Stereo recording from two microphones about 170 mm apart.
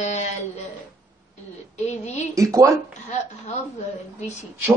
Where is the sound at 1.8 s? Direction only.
40° left (ahead or behind).